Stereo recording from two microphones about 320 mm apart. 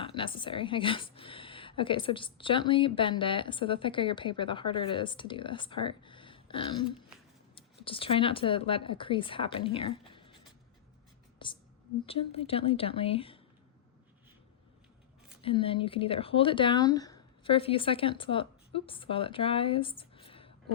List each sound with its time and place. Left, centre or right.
0.0 s a woman's voice: centre
15.4 s speech: centre